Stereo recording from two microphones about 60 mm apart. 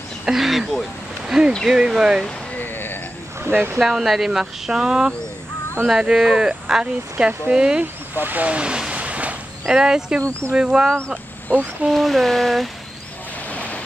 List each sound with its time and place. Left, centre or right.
0.2 s a sound: centre
1.7 s speech: centre
2.6 s a sound: left
3.4 s speech: right
3.8 s speech: centre
7.8 s speech: right; by 8.9 s centre
8.9 s a sound: right
9.7 s speech: centre
11.5 s speech: left
11.9 s speech: centre
13.5 s waves: left